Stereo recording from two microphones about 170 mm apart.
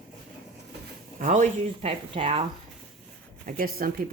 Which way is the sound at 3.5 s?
55° right (ahead or behind).